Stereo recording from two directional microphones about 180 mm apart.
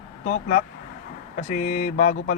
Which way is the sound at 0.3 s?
45° left (ahead or behind).